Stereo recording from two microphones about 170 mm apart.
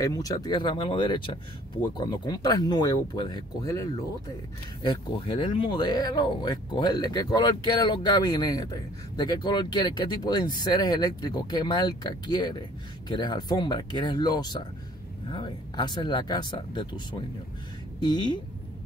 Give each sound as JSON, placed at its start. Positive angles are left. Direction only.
{"t": 0.0, "sound": "speech", "side_deg": 20}